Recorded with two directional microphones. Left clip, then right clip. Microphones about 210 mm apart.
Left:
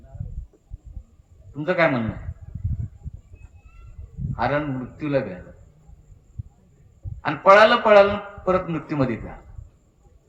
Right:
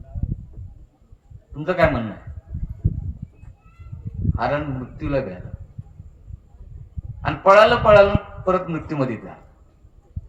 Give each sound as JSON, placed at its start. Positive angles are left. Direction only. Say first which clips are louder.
{"t": 1.5, "sound": "a man's voice", "louder": "right 1 dB", "side_deg": -35}
{"t": 4.4, "sound": "a man's voice", "louder": "even", "side_deg": -30}
{"t": 7.3, "sound": "a man's voice", "louder": "right 1 dB", "side_deg": -35}